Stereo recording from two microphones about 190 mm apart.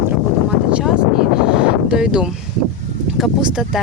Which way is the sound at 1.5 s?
5° right (ahead or behind).